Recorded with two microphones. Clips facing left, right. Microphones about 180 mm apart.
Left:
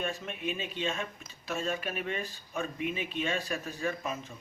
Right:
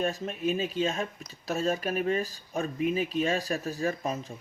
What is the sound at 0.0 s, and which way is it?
Speech, 40° right (ahead or behind).